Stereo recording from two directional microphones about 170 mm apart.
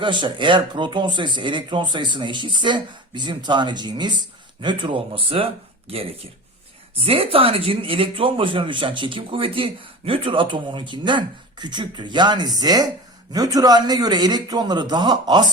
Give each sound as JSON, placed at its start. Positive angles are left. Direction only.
{"t": 0.0, "sound": "speech", "side_deg": -30}